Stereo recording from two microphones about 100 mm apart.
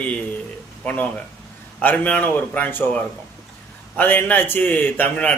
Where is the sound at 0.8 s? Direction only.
10° left (ahead or behind).